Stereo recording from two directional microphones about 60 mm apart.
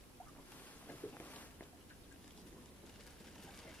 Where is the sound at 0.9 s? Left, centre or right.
Left.